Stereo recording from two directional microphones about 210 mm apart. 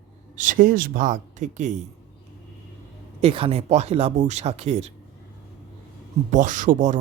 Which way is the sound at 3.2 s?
25° right (ahead or behind).